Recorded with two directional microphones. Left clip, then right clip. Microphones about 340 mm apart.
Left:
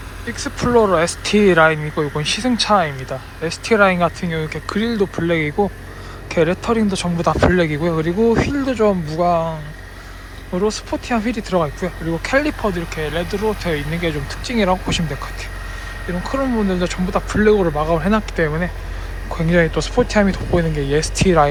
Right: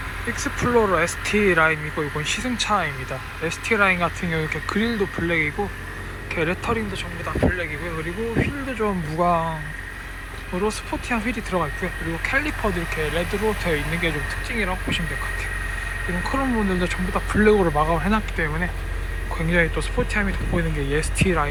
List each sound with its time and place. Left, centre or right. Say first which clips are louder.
0.3 s speech: left 4 dB; centre
16.2 s speech: left 4 dB; centre